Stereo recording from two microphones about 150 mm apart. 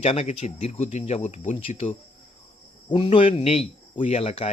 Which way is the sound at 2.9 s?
35° left (ahead or behind).